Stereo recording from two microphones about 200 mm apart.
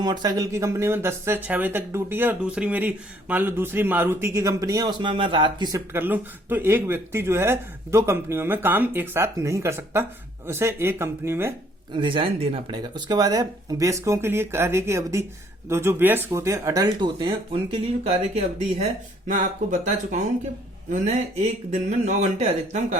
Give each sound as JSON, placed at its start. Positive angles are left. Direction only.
{"t": 0.0, "sound": "speech", "side_deg": -20}
{"t": 11.9, "sound": "speech", "side_deg": -25}